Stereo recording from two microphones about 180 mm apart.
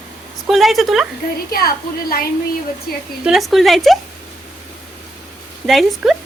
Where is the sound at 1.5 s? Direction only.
55° left (ahead or behind).